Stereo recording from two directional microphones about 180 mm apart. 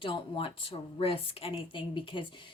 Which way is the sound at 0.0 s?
30° left (ahead or behind).